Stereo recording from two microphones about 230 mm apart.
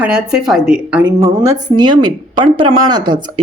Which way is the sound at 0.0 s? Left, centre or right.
Centre.